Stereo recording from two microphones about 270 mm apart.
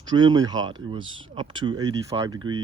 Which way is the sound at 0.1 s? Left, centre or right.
Centre.